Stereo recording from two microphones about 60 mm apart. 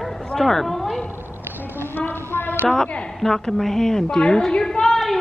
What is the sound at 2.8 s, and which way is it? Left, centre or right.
Speech, centre.